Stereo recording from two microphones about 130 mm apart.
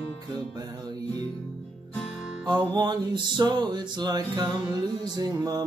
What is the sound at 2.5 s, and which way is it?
Music, 35° right (ahead or behind).